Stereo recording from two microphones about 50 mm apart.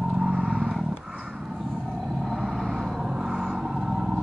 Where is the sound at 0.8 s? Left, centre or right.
Centre.